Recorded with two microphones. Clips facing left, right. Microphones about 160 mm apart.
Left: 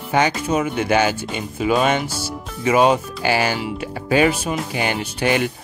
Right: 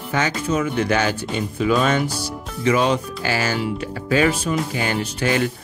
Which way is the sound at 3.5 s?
5° left (ahead or behind).